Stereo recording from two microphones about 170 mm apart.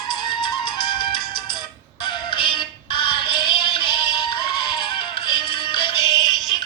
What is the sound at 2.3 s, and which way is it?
Music, 30° left (ahead or behind).